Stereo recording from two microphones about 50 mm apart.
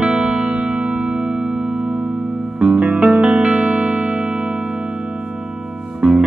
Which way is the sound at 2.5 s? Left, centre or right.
Centre.